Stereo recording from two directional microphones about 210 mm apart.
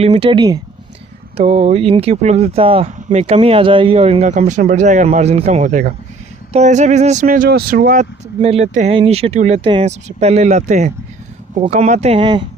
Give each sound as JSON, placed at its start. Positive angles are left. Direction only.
{"t": 0.0, "sound": "speech", "side_deg": -25}
{"t": 1.4, "sound": "speech", "side_deg": -35}
{"t": 8.4, "sound": "speech", "side_deg": -30}